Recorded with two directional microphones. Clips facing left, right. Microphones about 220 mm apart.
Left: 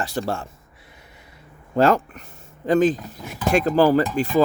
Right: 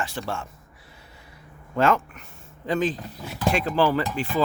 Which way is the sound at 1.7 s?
35° left (ahead or behind).